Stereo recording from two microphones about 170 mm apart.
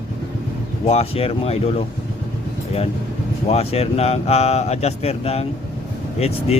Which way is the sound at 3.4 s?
40° left (ahead or behind).